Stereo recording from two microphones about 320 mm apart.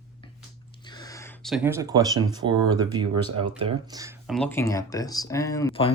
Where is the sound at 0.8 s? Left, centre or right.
Centre.